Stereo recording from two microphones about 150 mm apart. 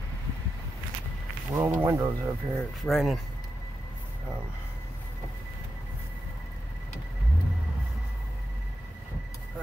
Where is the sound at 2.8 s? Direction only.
Centre (ahead or behind).